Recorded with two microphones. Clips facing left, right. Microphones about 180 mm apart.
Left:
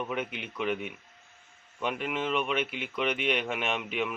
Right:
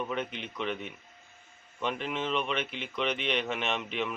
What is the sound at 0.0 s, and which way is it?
Speech, 10° left (ahead or behind).